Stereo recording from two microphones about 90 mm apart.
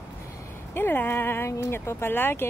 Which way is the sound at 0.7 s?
25° left (ahead or behind).